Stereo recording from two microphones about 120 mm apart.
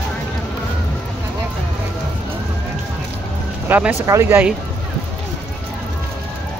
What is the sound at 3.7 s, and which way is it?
Speech, 15° right (ahead or behind).